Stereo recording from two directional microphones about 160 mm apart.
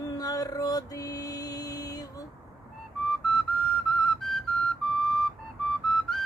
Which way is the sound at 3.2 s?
Centre (ahead or behind).